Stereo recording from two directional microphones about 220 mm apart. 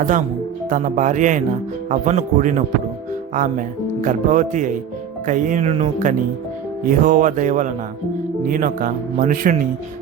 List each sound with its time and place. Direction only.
0.0 s speech: 35° right (ahead or behind)